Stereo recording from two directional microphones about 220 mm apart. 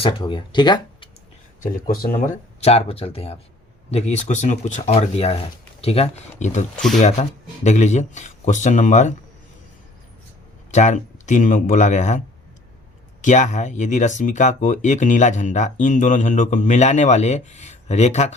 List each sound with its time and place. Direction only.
0.0 s speech: 20° left (ahead or behind)
1.6 s speech: 40° left (ahead or behind)
10.7 s speech: 35° left (ahead or behind)
13.2 s speech: 35° left (ahead or behind)